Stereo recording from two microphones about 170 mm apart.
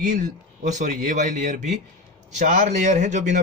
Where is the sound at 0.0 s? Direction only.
45° right (ahead or behind).